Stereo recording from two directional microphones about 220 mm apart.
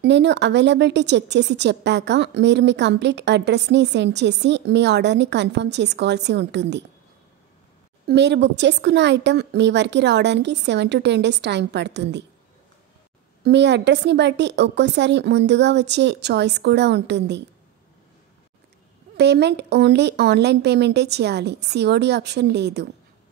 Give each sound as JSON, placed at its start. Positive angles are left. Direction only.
{"t": 0.0, "sound": "a woman's voice", "side_deg": -50}
{"t": 8.1, "sound": "a woman's voice", "side_deg": -50}
{"t": 13.4, "sound": "a woman's voice", "side_deg": -50}
{"t": 19.1, "sound": "a woman's voice", "side_deg": -50}